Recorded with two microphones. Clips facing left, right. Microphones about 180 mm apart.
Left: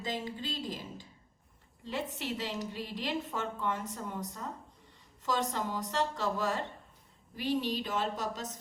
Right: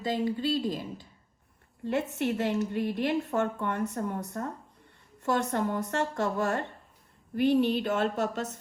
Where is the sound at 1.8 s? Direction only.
55° right (ahead or behind).